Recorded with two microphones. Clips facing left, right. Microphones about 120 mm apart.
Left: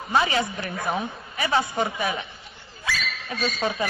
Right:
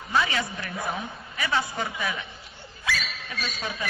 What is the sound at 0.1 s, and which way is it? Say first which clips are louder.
A man's voice: left 3 dB; 30° left (ahead or behind).